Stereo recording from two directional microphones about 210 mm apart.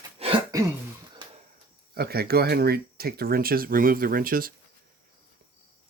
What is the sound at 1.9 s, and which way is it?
Speech, 50° right (ahead or behind).